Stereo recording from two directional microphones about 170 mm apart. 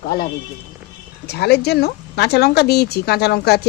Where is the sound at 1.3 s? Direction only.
70° left (ahead or behind).